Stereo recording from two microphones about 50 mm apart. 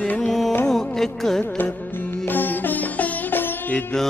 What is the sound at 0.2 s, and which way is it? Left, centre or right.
Music, centre.